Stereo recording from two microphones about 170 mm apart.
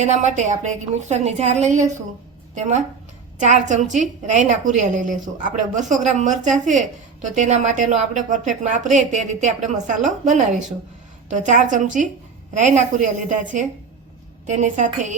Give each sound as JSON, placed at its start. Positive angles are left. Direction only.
{"t": 0.0, "sound": "a woman's voice", "side_deg": -45}
{"t": 10.3, "sound": "a woman's voice", "side_deg": 0}
{"t": 11.3, "sound": "a woman's voice", "side_deg": -45}